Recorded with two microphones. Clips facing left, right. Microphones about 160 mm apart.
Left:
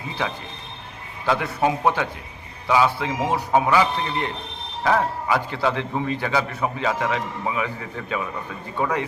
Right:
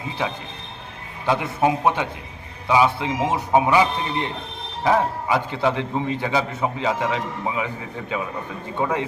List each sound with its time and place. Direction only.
1.3 s a man's voice: 20° right (ahead or behind)